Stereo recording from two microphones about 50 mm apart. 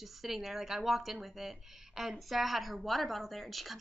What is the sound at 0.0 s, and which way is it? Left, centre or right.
A woman's voice, centre.